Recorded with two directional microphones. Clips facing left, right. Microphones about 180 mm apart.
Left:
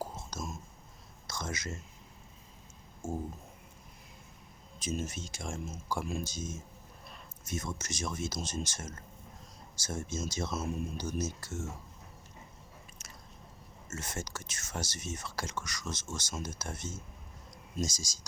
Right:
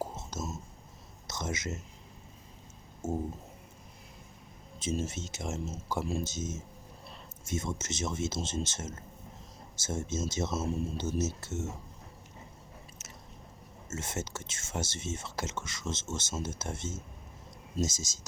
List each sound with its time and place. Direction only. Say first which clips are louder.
0.0 s whispering: right 3 dB; 25° right (ahead or behind)
1.3 s speech: right 3 dB; 20° right (ahead or behind)
3.0 s speech: right 3 dB; 25° right (ahead or behind)
4.8 s speech: right 3 dB; 25° right (ahead or behind)
13.0 s biting: right 2 dB; 25° right (ahead or behind)
13.9 s speech: right 3 dB; 25° right (ahead or behind)